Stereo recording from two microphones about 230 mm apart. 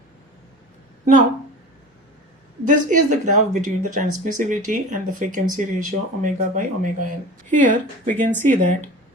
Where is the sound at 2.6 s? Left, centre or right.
Right.